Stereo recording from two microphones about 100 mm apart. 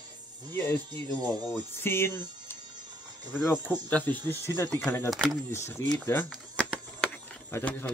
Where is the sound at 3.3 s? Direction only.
20° left (ahead or behind).